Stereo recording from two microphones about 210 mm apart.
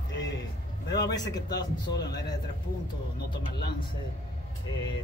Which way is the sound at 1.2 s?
20° left (ahead or behind).